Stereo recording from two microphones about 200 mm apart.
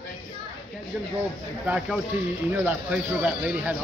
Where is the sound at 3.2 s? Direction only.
5° right (ahead or behind).